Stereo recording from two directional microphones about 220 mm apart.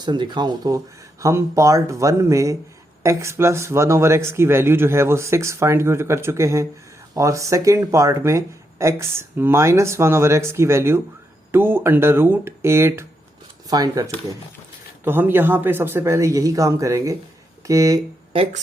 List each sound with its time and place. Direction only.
0.0 s speech: 20° right (ahead or behind)